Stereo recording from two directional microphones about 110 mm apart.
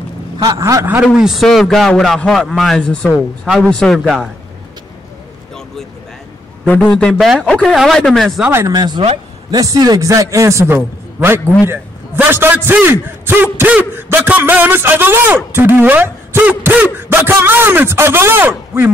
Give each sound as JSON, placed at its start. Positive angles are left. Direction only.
{"t": 0.4, "sound": "a man's voice", "side_deg": -30}
{"t": 1.0, "sound": "a man's voice", "side_deg": -5}
{"t": 6.6, "sound": "a man's voice", "side_deg": 10}
{"t": 8.5, "sound": "a man's voice", "side_deg": -20}
{"t": 8.7, "sound": "a man's voice", "side_deg": -40}